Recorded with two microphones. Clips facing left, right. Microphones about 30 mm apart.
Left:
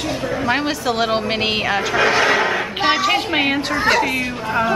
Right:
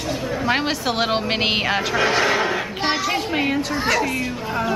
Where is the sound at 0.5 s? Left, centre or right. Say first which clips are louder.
Left 1 dB; centre.